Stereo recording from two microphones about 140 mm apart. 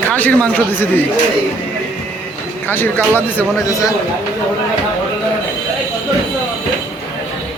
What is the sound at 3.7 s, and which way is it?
Speech, 25° left (ahead or behind).